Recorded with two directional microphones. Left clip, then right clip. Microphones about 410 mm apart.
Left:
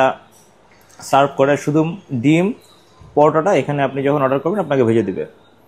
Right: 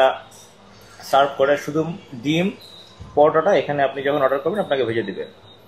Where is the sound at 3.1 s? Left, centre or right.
Left.